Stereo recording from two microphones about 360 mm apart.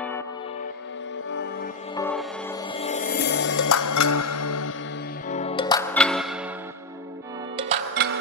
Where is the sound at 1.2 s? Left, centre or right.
Left.